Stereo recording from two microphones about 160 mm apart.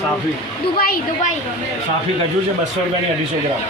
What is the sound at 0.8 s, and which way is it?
Speech, 65° left (ahead or behind).